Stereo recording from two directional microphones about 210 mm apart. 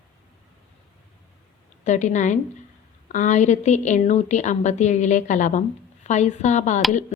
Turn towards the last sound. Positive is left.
turn(degrees=35)  # may be behind; listen again after turning